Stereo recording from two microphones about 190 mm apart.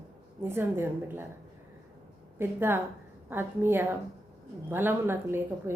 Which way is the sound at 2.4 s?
10° right (ahead or behind).